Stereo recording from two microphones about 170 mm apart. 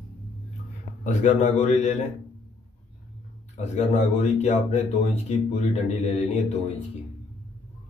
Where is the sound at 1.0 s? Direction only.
45° left (ahead or behind).